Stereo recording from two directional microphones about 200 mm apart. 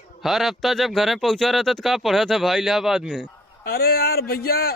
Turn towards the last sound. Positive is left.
turn(degrees=50)  # may be behind; listen again after turning